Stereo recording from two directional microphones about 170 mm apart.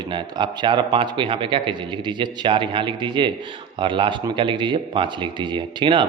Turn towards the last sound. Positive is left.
turn(degrees=-30)  # may be behind; listen again after turning